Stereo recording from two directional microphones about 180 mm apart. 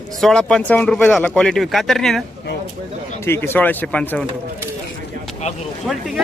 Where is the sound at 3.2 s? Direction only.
15° left (ahead or behind).